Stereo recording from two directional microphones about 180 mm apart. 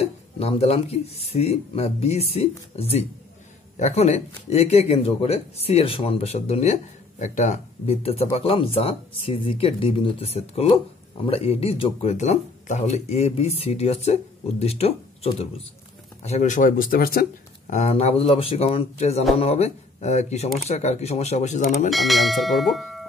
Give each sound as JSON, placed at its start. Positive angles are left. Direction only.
{"t": 0.0, "sound": "speech", "side_deg": 35}
{"t": 17.7, "sound": "speech", "side_deg": 35}
{"t": 21.9, "sound": "speech", "side_deg": 0}